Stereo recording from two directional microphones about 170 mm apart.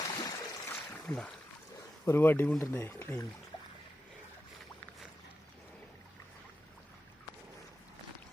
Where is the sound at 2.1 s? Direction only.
15° left (ahead or behind).